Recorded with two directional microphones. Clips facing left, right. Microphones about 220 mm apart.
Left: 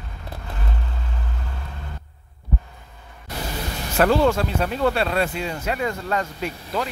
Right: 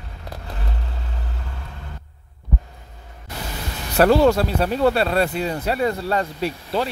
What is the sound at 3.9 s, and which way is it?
Speech, 40° right (ahead or behind).